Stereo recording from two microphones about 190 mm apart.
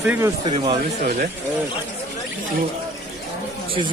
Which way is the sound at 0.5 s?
25° right (ahead or behind).